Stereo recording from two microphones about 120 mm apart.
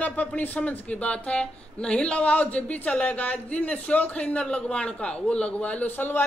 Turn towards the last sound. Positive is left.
turn(degrees=15)  # may be behind; listen again after turning